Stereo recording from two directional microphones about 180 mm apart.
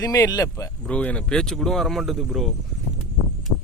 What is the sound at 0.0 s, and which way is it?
Speech, 20° left (ahead or behind).